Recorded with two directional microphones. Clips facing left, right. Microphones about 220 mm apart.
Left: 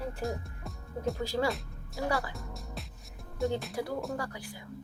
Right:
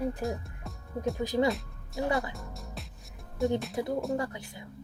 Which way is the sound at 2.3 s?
Centre (ahead or behind).